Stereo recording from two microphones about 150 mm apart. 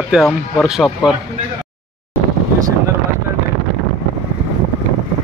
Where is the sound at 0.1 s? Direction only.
Centre (ahead or behind).